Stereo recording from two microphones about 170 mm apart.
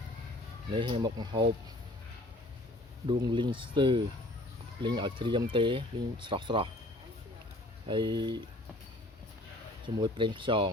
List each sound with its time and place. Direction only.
0.7 s speech: 30° right (ahead or behind)
3.2 s speech: 25° right (ahead or behind)
7.9 s speech: 25° right (ahead or behind)
9.8 s speech: 30° right (ahead or behind)